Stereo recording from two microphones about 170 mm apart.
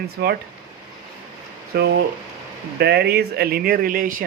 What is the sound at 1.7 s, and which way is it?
Speech, 70° right (ahead or behind).